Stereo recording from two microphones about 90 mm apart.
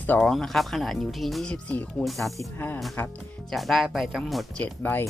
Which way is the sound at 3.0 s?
20° left (ahead or behind).